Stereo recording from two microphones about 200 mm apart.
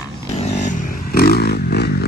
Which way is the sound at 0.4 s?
35° left (ahead or behind).